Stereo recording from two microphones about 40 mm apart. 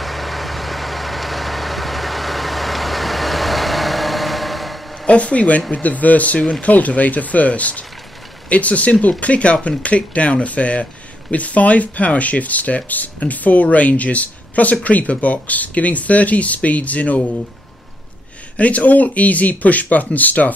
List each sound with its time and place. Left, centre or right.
0.0 s vehicle: centre
5.0 s speech: left
18.6 s speech: left